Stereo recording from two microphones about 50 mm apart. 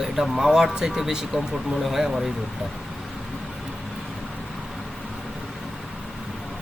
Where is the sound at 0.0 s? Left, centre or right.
Centre.